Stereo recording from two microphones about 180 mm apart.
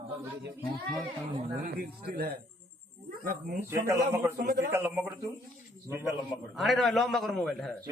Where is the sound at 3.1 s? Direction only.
50° right (ahead or behind).